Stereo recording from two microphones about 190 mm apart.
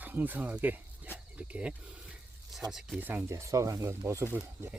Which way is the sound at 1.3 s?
5° right (ahead or behind).